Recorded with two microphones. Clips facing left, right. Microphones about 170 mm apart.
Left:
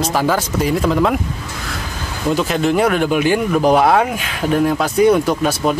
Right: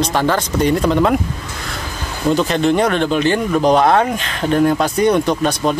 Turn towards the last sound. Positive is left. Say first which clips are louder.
# even
turn(degrees=5)  # may be behind; listen again after turning